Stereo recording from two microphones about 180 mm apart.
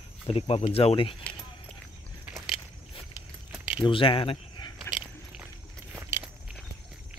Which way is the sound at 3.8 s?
30° left (ahead or behind).